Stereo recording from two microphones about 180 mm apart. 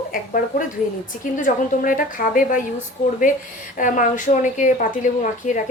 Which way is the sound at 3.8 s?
45° left (ahead or behind).